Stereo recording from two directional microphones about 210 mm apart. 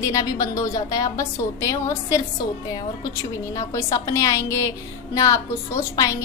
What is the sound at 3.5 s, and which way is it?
A woman's voice, 15° left (ahead or behind).